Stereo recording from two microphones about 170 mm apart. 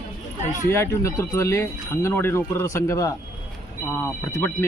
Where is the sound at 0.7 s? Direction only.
15° left (ahead or behind).